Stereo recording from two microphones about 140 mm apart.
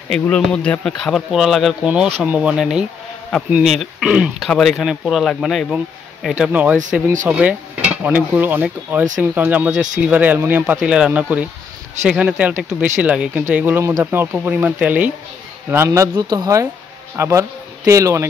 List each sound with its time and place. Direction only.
0.1 s speech: 5° left (ahead or behind); by 18.2 s 20° right (ahead or behind)